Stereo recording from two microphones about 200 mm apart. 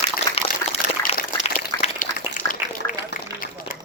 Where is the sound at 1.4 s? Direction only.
35° left (ahead or behind).